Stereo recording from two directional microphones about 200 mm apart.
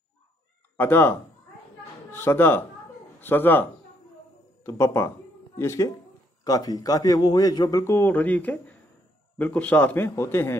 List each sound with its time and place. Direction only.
0.7 s a man's voice: 10° left (ahead or behind)
4.6 s a man's voice: 15° left (ahead or behind)